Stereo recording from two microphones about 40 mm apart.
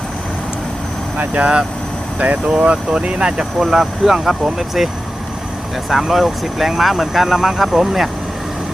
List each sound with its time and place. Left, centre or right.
2.1 s speech: right
3.6 s speech: centre
5.9 s speech: centre